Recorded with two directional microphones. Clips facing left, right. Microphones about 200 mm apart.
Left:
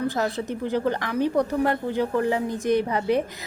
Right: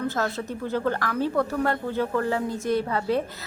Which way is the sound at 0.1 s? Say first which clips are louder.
Left 2 dB; 15° left (ahead or behind).